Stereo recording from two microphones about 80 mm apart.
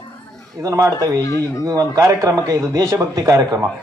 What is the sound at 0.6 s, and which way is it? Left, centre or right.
A man's voice, right.